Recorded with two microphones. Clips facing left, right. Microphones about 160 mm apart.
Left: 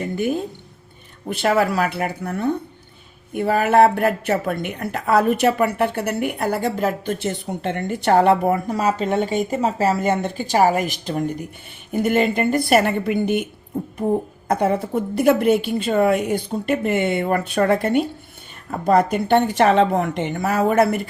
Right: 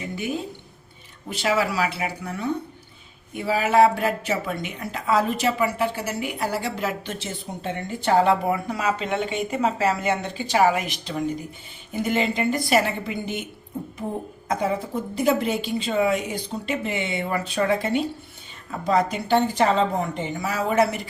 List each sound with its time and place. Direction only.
0.0 s a woman's voice: 50° left (ahead or behind)
14.4 s a woman's voice: 65° left (ahead or behind)